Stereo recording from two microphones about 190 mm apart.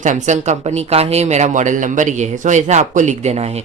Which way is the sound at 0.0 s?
40° right (ahead or behind).